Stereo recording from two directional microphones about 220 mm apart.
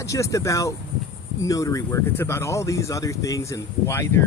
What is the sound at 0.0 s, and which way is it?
Speech, 15° left (ahead or behind).